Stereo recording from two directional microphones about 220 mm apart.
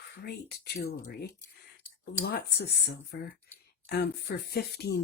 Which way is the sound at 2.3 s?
45° left (ahead or behind).